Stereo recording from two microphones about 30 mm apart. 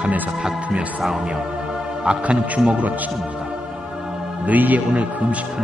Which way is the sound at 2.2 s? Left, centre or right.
Right.